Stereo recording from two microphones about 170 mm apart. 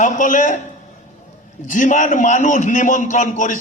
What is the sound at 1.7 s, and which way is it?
A man's voice, 50° left (ahead or behind).